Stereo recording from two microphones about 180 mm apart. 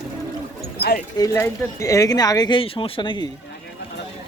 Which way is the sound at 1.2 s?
15° left (ahead or behind).